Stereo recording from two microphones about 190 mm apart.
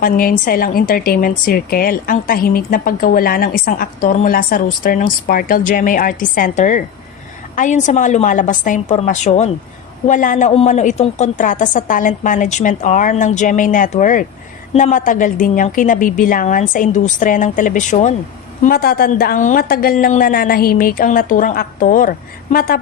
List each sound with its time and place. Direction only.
0.0 s a woman's voice: 50° left (ahead or behind)
18.6 s speech: 50° left (ahead or behind)